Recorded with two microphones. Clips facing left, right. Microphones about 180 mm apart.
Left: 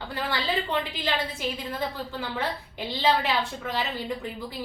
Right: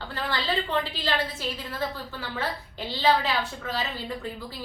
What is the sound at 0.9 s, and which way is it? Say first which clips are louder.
A woman's voice: even; 15° left (ahead or behind).